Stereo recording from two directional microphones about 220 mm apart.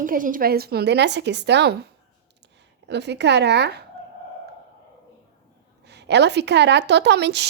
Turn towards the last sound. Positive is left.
turn(degrees=-50)  # may be behind; listen again after turning